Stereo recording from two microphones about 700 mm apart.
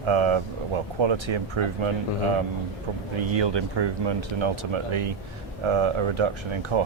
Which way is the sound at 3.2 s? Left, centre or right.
Right.